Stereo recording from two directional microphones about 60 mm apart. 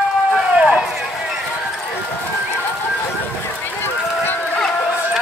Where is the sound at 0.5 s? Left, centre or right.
Centre.